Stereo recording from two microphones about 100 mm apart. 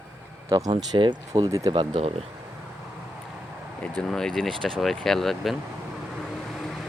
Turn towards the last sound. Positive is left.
turn(degrees=0)  # may be behind; listen again after turning